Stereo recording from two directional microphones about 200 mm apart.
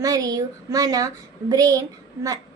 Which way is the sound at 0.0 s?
15° right (ahead or behind).